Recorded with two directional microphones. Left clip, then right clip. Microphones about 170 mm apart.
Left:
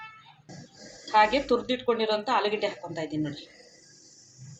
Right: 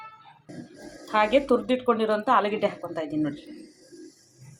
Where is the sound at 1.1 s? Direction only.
25° right (ahead or behind).